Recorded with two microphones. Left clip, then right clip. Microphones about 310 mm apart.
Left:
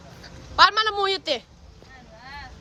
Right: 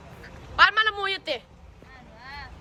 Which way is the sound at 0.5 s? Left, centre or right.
Centre.